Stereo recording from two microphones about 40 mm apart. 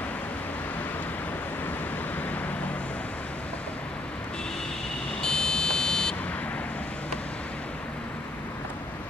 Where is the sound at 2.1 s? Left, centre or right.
Left.